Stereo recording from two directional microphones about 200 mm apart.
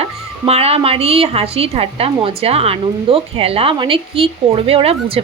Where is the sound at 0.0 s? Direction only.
30° right (ahead or behind).